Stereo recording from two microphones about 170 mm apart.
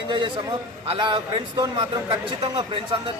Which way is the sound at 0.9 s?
30° right (ahead or behind).